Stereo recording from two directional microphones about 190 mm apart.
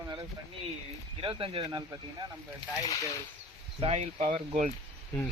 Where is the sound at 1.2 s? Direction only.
25° right (ahead or behind).